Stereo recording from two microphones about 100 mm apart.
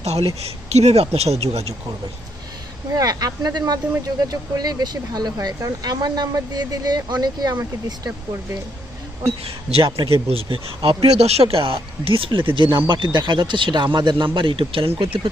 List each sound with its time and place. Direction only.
0.0 s speech: 90° right
3.0 s speech: 40° right (ahead or behind)
9.2 s speech: 75° right (ahead or behind); by 15.2 s 60° right (ahead or behind)